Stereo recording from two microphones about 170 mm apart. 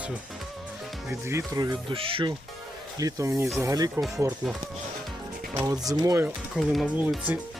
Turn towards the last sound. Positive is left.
turn(degrees=0)  # may be behind; listen again after turning